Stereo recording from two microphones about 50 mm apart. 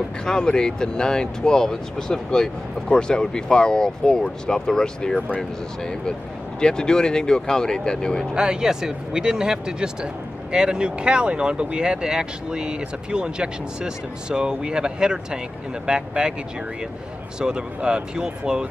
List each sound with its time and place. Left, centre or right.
0.2 s speech: centre
8.4 s speech: centre
17.4 s speech: centre